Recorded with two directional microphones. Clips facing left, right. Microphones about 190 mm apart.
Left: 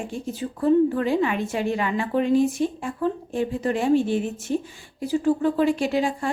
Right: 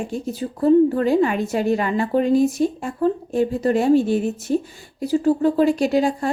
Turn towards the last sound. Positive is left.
turn(degrees=-40)  # may be behind; listen again after turning